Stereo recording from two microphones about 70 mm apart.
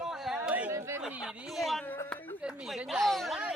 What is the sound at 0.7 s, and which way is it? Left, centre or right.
Speech, right.